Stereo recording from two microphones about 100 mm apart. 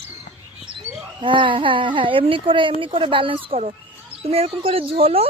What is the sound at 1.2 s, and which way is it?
A woman's voice, 55° right (ahead or behind).